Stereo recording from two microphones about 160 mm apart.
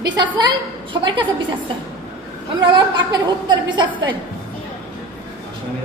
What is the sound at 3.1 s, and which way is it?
A woman's voice, 30° right (ahead or behind).